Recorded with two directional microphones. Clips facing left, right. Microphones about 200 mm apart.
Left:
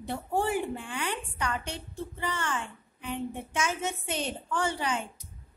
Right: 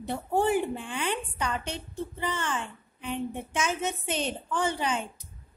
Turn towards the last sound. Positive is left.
turn(degrees=-20)  # may be behind; listen again after turning